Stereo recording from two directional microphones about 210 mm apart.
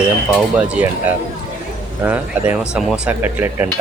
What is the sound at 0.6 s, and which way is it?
Speech, 5° right (ahead or behind).